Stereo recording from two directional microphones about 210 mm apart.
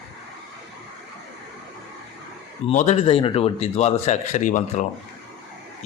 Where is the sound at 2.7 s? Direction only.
40° left (ahead or behind).